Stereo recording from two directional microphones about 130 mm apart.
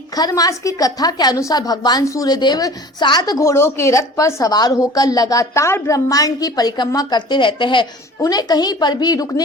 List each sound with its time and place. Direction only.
0.2 s a woman's voice: 30° left (ahead or behind)